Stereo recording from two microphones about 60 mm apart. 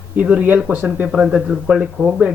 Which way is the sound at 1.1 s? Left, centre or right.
Centre.